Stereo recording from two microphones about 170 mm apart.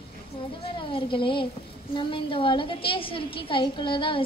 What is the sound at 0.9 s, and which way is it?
A woman's voice, 30° left (ahead or behind).